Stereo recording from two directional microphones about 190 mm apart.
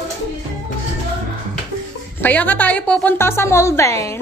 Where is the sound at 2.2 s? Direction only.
10° left (ahead or behind).